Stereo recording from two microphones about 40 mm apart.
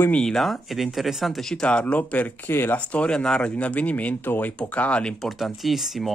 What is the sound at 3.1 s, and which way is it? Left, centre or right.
Speech, centre.